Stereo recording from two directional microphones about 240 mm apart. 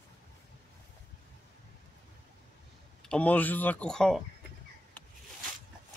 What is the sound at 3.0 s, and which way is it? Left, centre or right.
Speech, centre.